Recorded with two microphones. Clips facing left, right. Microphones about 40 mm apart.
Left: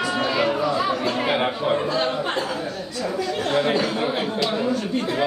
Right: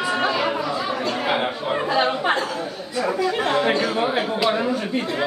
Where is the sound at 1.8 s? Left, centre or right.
Centre.